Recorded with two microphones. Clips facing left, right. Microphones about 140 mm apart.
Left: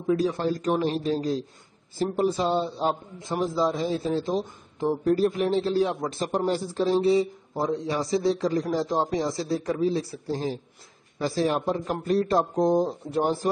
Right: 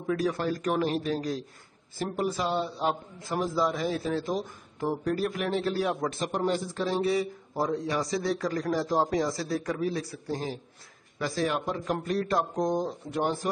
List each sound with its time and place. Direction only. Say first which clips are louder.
0.0 s speech: left 4 dB; 25° left (ahead or behind)